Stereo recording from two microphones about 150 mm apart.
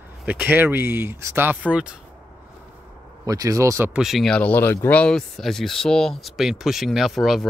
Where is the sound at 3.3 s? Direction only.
25° right (ahead or behind).